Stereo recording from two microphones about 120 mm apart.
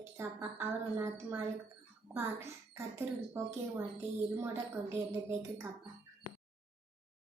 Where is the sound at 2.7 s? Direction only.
25° right (ahead or behind).